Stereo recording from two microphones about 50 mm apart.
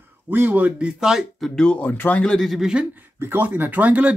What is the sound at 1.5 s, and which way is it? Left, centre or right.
Speech, left.